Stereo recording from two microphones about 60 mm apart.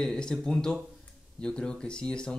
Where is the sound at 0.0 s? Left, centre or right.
Centre.